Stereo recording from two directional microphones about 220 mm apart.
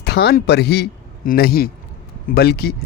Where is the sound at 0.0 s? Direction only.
45° left (ahead or behind).